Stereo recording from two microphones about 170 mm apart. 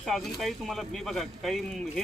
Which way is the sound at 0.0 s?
Centre (ahead or behind).